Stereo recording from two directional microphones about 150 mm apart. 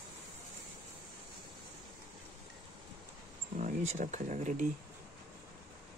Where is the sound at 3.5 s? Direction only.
50° right (ahead or behind).